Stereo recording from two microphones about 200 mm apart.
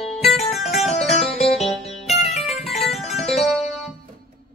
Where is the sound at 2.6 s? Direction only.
Centre (ahead or behind).